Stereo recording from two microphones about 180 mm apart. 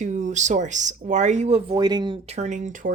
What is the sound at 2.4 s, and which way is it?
Speech, 40° right (ahead or behind).